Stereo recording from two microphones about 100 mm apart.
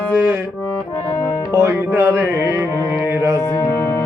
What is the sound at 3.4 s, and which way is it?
Speech, 30° left (ahead or behind).